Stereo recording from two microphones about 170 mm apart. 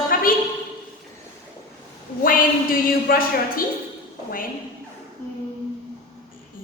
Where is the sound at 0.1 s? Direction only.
55° left (ahead or behind).